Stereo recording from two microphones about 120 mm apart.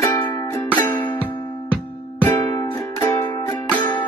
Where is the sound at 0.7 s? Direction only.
15° left (ahead or behind).